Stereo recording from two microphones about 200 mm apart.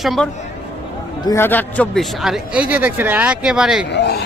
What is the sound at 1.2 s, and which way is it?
Speech, 15° left (ahead or behind).